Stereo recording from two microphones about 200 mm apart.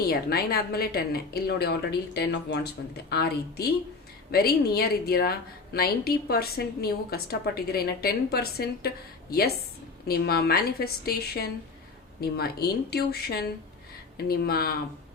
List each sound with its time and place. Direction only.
0.1 s a woman's voice: 50° left (ahead or behind)
10.1 s a woman's voice: 50° left (ahead or behind)